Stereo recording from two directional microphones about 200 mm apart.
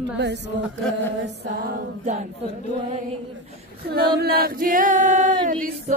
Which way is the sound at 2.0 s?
35° right (ahead or behind).